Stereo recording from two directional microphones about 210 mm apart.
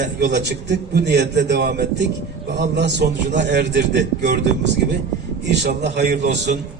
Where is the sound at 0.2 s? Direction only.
55° right (ahead or behind).